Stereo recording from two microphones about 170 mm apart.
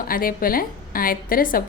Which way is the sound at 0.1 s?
55° left (ahead or behind).